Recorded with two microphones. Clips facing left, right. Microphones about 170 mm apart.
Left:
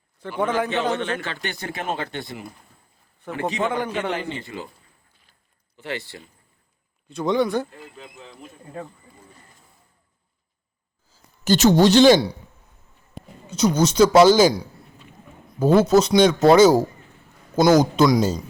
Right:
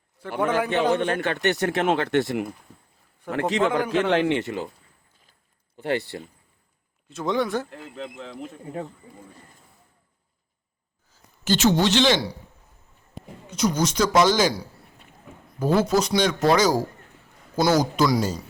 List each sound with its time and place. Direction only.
0.2 s a man's voice: 10° right (ahead or behind)
1.0 s a man's voice: 55° right (ahead or behind)
4.0 s speech: 85° right
5.7 s speech: 50° right (ahead or behind)
7.1 s speech: centre (ahead or behind)
7.9 s speech: 80° right
11.1 s a woman's voice: 40° left (ahead or behind)
13.5 s speech: 25° left (ahead or behind)
15.5 s speech: 25° left (ahead or behind)